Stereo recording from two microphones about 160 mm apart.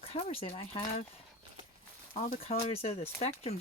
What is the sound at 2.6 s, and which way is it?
Speech, 40° left (ahead or behind).